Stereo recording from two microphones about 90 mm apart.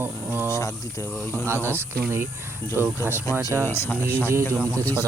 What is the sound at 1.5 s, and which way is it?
Speech, 25° right (ahead or behind).